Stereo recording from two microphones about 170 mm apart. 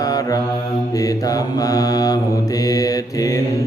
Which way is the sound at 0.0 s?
20° left (ahead or behind).